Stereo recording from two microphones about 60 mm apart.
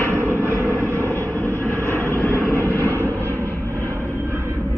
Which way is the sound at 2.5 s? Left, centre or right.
Left.